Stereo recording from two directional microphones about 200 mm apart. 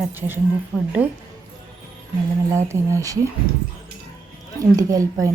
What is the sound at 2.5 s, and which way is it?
Speech, 15° right (ahead or behind).